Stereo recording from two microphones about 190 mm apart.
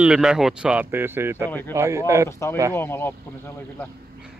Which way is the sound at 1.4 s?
10° left (ahead or behind).